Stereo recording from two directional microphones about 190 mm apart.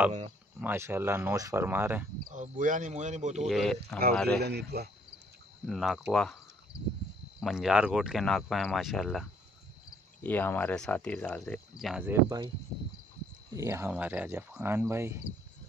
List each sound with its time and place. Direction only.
0.6 s speech: 10° right (ahead or behind)
2.3 s speech: 45° right (ahead or behind)
3.4 s speech: centre (ahead or behind)
4.4 s speech: 60° right (ahead or behind)
5.7 s speech: centre (ahead or behind)
7.3 s speech: centre (ahead or behind)
13.6 s speech: 15° right (ahead or behind)